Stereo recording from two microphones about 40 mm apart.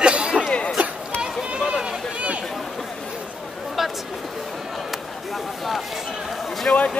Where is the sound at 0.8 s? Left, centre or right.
Right.